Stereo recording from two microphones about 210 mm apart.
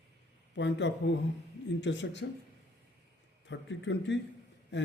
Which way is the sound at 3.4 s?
60° left (ahead or behind).